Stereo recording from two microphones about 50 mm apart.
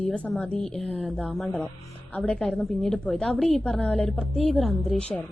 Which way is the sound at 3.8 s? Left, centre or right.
Left.